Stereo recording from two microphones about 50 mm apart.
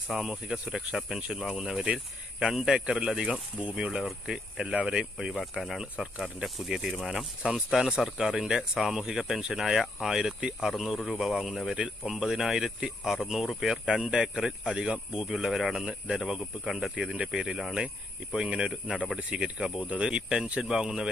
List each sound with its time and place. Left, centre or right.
0.1 s speech: centre
5.3 s speech: centre
5.8 s speech: centre
12.2 s speech: centre
16.9 s speech: right